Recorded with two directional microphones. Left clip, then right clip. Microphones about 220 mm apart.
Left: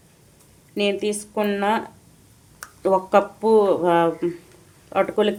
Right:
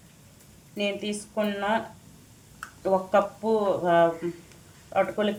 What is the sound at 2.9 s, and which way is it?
Speech, 55° left (ahead or behind).